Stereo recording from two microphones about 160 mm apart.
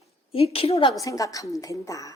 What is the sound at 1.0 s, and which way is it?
A woman's voice, 20° left (ahead or behind).